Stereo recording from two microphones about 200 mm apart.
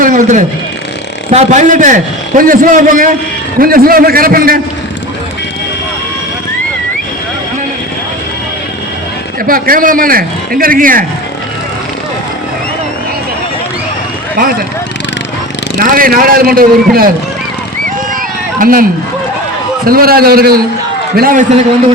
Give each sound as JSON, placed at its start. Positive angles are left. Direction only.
{"t": 0.0, "sound": "a sound", "side_deg": -40}
{"t": 1.3, "sound": "a man's voice", "side_deg": -35}
{"t": 9.5, "sound": "speech", "side_deg": -45}
{"t": 15.8, "sound": "speech", "side_deg": -45}
{"t": 18.6, "sound": "speech", "side_deg": -45}